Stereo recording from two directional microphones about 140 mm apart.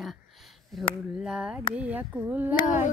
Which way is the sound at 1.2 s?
5° right (ahead or behind).